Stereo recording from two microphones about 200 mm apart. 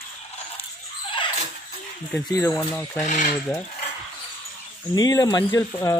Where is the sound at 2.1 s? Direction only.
15° left (ahead or behind).